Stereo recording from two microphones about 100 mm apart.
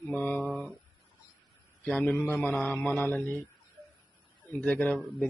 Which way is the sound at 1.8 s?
10° left (ahead or behind).